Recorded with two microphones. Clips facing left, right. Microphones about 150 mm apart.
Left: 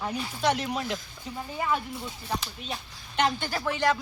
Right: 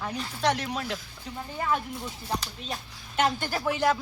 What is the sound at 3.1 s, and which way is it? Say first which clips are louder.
Speech: right 1 dB; 5° right (ahead or behind).